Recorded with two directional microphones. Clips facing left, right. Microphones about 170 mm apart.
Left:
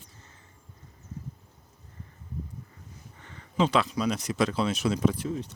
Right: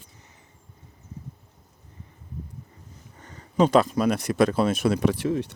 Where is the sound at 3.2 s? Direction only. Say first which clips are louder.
Right 5 dB; 40° right (ahead or behind); by 5.5 s 70° right (ahead or behind).